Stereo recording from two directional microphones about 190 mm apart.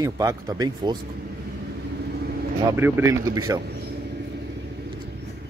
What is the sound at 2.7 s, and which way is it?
Speech, 15° right (ahead or behind).